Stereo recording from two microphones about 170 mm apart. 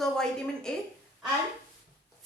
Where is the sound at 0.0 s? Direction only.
5° left (ahead or behind).